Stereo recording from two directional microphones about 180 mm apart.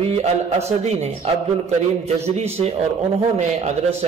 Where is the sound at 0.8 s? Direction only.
35° right (ahead or behind).